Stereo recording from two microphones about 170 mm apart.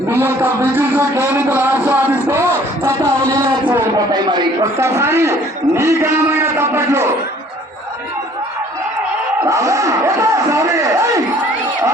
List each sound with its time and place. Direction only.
0.1 s a sound: 10° right (ahead or behind)
4.1 s a man's voice: 25° right (ahead or behind)
9.5 s speech: 20° right (ahead or behind)